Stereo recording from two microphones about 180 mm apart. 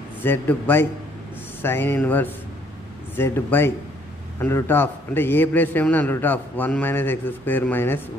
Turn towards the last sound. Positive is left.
turn(degrees=10)  # may be behind; listen again after turning